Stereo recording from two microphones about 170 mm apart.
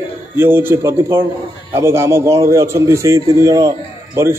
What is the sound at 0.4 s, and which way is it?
A man's voice, 10° right (ahead or behind).